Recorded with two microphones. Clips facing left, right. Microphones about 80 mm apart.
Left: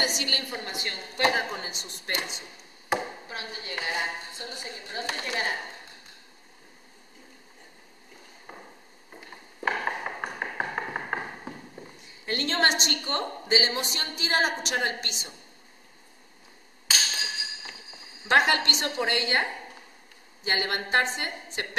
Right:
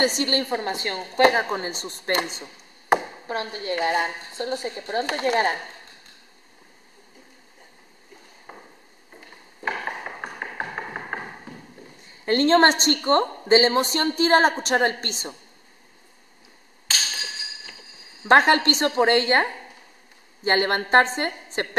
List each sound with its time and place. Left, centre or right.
0.0 s a woman's voice: right
2.9 s chopping: right
3.8 s speech: right
8.5 s a sound: centre
9.6 s tap: centre
12.3 s a woman's voice: right
16.9 s a sound: centre
18.3 s a woman's voice: right
20.4 s a woman's voice: right